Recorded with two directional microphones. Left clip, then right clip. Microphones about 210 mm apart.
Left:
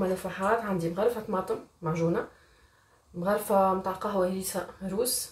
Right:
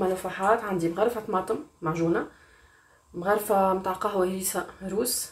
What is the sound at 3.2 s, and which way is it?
Speech, 30° right (ahead or behind).